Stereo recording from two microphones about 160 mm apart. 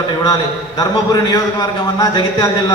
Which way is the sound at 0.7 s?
25° left (ahead or behind).